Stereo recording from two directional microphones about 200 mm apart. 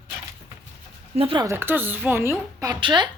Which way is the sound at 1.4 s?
10° right (ahead or behind).